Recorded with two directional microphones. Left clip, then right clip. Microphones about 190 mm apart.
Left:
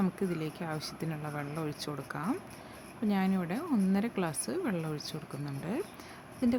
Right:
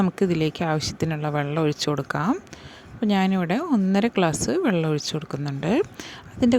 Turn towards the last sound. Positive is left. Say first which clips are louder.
# right 11 dB
turn(degrees=-45)  # may be behind; listen again after turning